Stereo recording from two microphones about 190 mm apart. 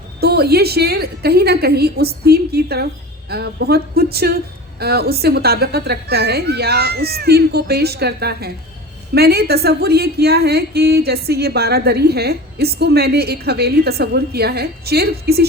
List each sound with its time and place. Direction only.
0.2 s a woman's voice: 55° right (ahead or behind)